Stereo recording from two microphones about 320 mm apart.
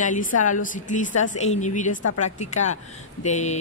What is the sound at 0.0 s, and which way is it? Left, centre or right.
Speech, left.